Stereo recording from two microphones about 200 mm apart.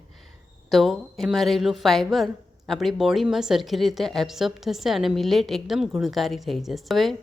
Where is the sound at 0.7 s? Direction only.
Centre (ahead or behind).